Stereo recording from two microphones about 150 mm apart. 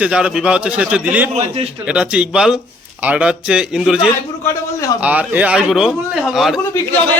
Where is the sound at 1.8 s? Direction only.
5° right (ahead or behind).